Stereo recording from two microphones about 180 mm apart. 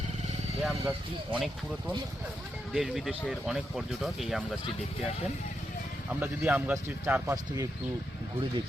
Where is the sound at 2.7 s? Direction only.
Centre (ahead or behind).